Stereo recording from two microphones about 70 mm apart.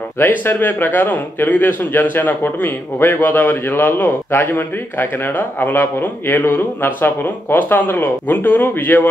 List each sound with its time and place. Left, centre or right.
0.2 s a man's voice: left